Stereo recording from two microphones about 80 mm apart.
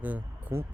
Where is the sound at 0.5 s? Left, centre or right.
Right.